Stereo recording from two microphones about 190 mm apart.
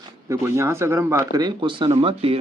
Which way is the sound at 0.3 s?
15° right (ahead or behind).